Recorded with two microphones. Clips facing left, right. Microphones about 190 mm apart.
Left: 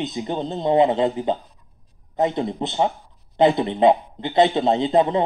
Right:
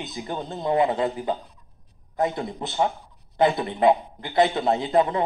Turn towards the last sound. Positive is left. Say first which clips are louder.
# left 3 dB
turn(degrees=20)  # may be behind; listen again after turning